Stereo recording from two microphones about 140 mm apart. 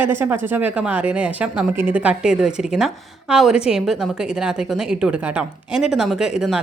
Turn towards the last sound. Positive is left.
turn(degrees=-5)  # may be behind; listen again after turning